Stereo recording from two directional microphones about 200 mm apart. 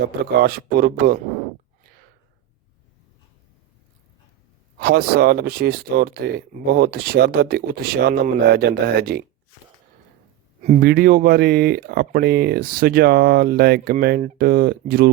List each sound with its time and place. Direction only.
0.0 s speech: 50° right (ahead or behind)
4.8 s speech: 50° right (ahead or behind)
10.8 s speech: 50° right (ahead or behind)